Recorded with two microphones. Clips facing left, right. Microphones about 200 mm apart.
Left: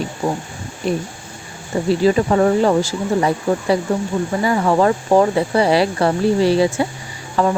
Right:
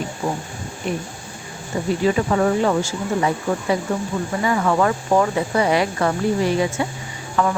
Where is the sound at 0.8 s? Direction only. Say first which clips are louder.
Left 5 dB; 35° left (ahead or behind).